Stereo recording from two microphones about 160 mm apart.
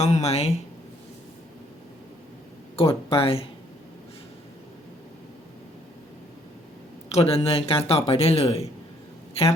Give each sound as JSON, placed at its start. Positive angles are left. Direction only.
{"t": 0.0, "sound": "speech", "side_deg": 45}
{"t": 2.7, "sound": "speech", "side_deg": 35}
{"t": 7.1, "sound": "speech", "side_deg": 40}